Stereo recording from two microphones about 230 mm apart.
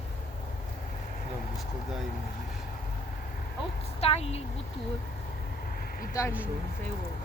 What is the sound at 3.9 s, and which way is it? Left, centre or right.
Speech, left.